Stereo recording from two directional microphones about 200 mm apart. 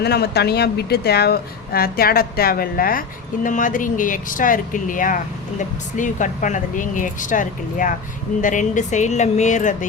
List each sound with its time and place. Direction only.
0.0 s speech: 55° left (ahead or behind); by 9.7 s 40° left (ahead or behind)